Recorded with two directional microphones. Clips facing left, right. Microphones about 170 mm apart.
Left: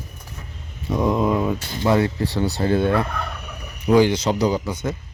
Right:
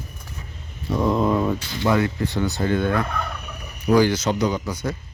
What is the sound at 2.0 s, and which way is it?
Speech, 30° left (ahead or behind).